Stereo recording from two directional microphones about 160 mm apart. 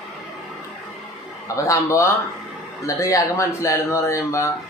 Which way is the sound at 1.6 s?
20° left (ahead or behind).